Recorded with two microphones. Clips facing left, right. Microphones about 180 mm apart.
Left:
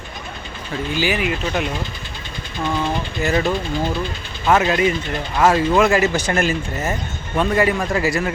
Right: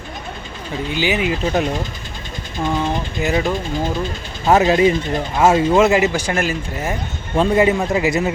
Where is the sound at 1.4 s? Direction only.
35° right (ahead or behind).